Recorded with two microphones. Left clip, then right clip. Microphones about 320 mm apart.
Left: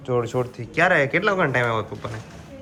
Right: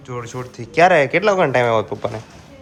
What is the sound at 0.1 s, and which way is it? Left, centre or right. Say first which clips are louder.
Speech: left 6 dB; centre.